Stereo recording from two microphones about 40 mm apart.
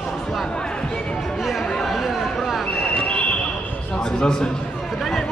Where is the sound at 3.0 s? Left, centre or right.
Left.